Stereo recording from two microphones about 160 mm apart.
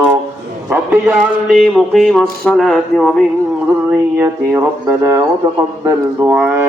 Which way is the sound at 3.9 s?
15° right (ahead or behind).